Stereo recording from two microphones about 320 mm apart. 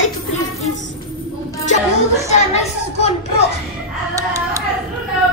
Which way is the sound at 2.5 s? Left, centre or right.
Centre.